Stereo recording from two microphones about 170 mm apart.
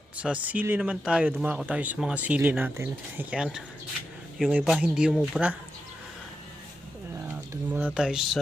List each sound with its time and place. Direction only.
0.2 s speech: 10° right (ahead or behind)
7.2 s a sound: 15° right (ahead or behind)
7.9 s speech: 5° right (ahead or behind)